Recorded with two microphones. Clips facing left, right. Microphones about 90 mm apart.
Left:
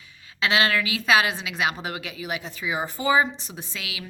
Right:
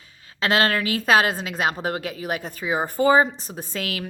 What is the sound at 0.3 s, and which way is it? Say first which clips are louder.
A woman's voice: right 2 dB; 45° right (ahead or behind).